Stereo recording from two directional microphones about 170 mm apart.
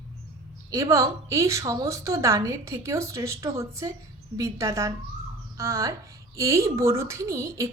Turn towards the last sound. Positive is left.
turn(degrees=-20)  # may be behind; listen again after turning